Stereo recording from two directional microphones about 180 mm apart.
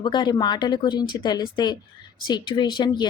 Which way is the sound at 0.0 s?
25° left (ahead or behind).